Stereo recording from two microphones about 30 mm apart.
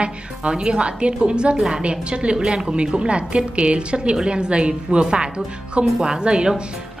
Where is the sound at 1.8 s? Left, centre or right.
Right.